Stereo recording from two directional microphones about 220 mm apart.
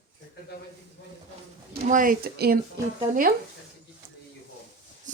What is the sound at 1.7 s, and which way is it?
Speech, 35° right (ahead or behind).